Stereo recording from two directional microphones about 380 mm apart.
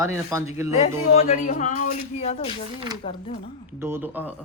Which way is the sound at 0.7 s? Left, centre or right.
Centre.